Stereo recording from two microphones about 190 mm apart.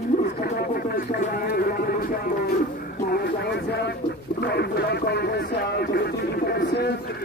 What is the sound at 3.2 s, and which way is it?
Music, 60° left (ahead or behind).